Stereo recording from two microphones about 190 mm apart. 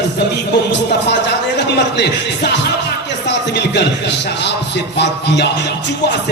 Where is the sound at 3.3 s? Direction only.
65° left (ahead or behind).